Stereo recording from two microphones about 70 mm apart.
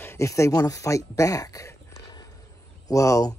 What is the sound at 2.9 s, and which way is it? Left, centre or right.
Speech, left.